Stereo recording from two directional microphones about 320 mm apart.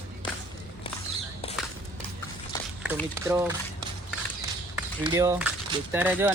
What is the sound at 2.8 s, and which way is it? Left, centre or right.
Speech, centre.